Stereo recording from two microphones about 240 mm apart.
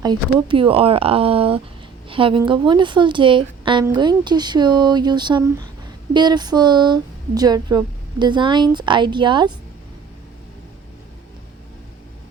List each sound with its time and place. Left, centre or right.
0.0 s a woman's voice: centre